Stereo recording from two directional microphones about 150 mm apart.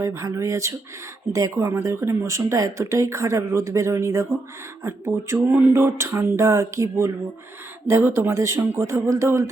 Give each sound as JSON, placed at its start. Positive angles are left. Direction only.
{"t": 0.0, "sound": "speech", "side_deg": -20}
{"t": 4.8, "sound": "a sound", "side_deg": -20}
{"t": 7.9, "sound": "speech", "side_deg": -20}